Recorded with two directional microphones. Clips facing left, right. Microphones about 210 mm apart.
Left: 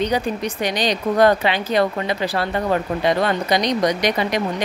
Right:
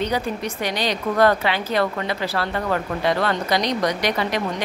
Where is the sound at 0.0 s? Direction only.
15° left (ahead or behind).